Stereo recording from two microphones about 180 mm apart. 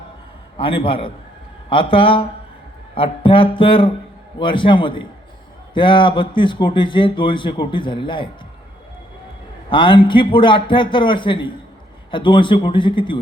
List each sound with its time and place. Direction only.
0.5 s speech: 30° left (ahead or behind)
9.6 s speech: 25° left (ahead or behind)